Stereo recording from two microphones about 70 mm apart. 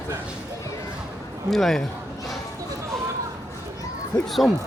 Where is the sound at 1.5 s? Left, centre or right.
Centre.